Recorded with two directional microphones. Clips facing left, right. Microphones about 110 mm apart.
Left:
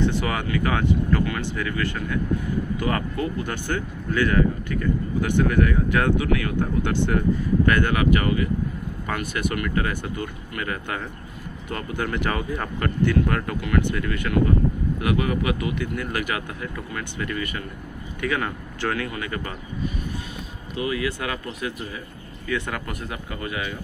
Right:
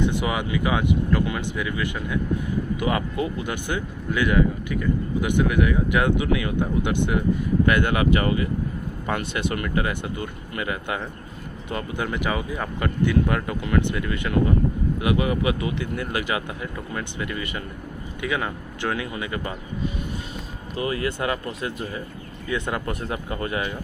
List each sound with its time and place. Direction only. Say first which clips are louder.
0.0 s speech: even; 15° right (ahead or behind)
20.7 s speech: even; 35° right (ahead or behind)